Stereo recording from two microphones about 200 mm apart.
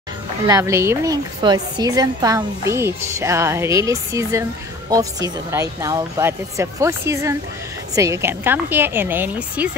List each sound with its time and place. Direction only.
0.5 s a woman's voice: 15° right (ahead or behind)